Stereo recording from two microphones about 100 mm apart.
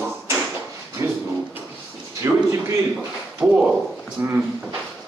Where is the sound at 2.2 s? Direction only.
35° right (ahead or behind).